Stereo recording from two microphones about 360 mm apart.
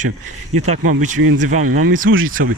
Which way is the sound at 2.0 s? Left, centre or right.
Right.